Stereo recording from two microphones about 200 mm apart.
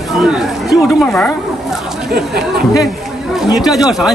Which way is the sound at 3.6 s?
Centre (ahead or behind).